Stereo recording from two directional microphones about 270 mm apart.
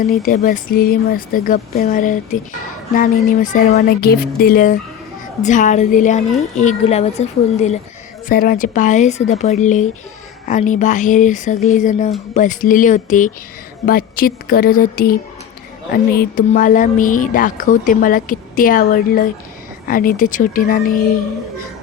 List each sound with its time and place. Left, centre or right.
0.0 s speech: left